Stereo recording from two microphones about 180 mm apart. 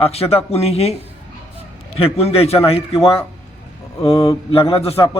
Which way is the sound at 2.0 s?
35° left (ahead or behind).